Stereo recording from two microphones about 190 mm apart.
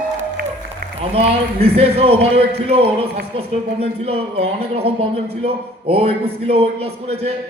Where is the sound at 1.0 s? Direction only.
30° right (ahead or behind).